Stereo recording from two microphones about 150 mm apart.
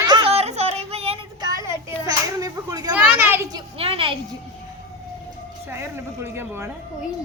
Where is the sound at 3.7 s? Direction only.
40° right (ahead or behind).